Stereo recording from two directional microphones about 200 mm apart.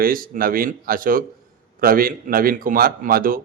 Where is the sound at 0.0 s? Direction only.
45° right (ahead or behind).